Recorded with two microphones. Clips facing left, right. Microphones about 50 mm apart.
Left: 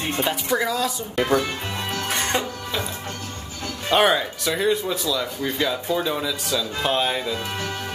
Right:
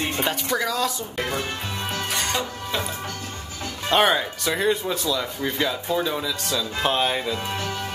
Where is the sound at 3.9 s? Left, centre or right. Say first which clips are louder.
Left 1 dB; centre.